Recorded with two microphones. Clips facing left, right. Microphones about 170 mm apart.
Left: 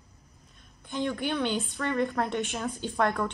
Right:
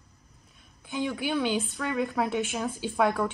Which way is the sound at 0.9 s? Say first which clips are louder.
Even; 5° right (ahead or behind).